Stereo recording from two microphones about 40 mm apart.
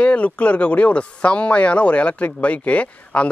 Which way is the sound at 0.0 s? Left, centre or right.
Left.